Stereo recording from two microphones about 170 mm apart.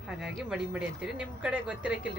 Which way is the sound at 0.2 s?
5° right (ahead or behind).